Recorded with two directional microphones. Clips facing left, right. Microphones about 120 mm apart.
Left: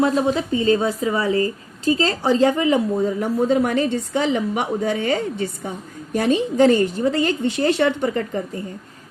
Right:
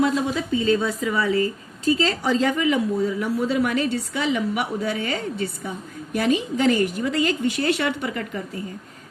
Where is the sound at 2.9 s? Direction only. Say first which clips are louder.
Left 2 dB; 45° left (ahead or behind).